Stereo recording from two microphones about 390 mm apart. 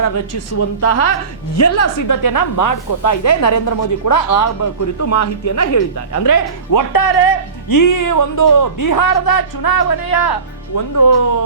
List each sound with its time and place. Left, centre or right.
0.0 s a woman's voice: left